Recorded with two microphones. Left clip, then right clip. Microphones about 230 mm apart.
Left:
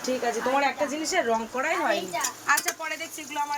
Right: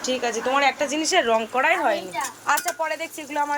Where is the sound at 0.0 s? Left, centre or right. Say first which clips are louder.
Right 2 dB; centre.